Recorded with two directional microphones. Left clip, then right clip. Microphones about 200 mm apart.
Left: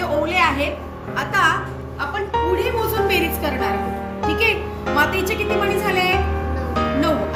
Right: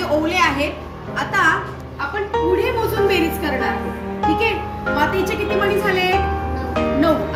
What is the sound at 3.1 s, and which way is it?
Speech, 30° left (ahead or behind).